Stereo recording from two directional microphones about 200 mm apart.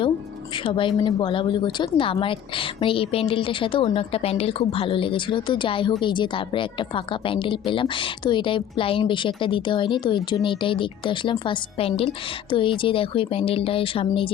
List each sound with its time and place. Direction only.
0.5 s a woman's voice: 25° left (ahead or behind)